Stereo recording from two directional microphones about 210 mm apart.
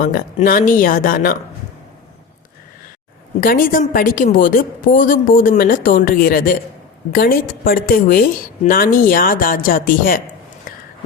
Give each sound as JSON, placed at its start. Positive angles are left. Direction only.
{"t": 0.0, "sound": "a woman's voice", "side_deg": 40}
{"t": 3.4, "sound": "a woman's voice", "side_deg": 40}